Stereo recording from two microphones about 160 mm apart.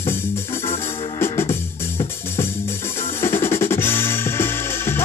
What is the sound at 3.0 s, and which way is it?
Drum kit, 15° left (ahead or behind).